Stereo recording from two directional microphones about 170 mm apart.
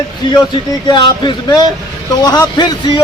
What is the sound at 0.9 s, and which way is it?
A man's voice, 25° left (ahead or behind).